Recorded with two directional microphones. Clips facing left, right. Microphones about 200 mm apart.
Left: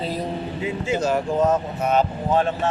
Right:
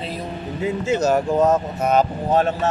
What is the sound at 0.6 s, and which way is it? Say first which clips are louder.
Speech: right 4 dB; 45° right (ahead or behind).